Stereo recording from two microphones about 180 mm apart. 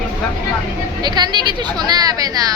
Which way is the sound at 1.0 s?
25° right (ahead or behind).